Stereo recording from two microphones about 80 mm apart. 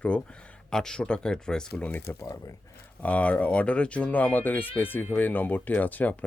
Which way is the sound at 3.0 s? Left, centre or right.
Centre.